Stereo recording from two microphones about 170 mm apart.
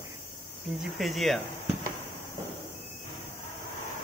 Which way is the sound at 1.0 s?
Centre (ahead or behind).